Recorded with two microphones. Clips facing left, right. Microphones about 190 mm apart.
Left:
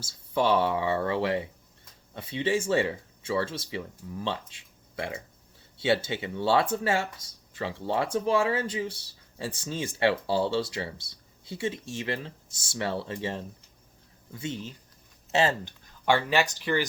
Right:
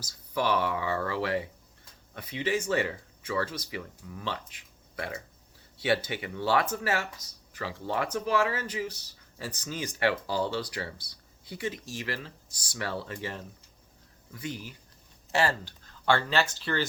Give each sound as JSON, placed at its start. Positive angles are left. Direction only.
{"t": 0.0, "sound": "speech", "side_deg": 25}